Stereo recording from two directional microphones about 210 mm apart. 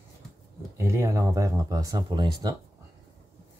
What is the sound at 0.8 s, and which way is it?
Speech, 15° right (ahead or behind).